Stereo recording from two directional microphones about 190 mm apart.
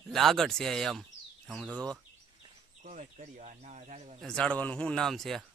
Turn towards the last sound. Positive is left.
turn(degrees=0)  # may be behind; listen again after turning